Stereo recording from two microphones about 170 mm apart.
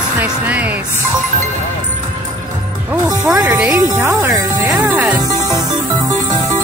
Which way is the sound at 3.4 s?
20° right (ahead or behind).